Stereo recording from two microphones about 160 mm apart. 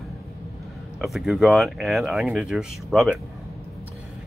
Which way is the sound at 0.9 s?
Centre (ahead or behind).